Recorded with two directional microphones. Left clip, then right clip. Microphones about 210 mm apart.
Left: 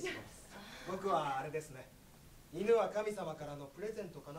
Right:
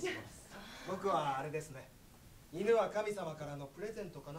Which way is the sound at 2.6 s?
30° right (ahead or behind).